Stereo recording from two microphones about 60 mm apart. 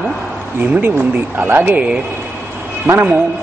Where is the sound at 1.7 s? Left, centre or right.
Centre.